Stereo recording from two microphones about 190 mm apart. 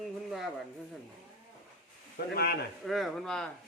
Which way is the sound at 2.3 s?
55° left (ahead or behind).